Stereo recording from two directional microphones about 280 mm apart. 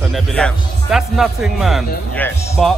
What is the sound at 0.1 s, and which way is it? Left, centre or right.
A man's voice, centre.